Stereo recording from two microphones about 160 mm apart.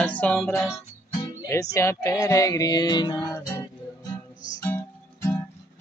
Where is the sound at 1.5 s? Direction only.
20° left (ahead or behind).